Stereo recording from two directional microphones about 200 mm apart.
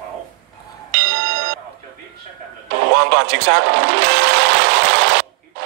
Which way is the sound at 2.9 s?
55° right (ahead or behind).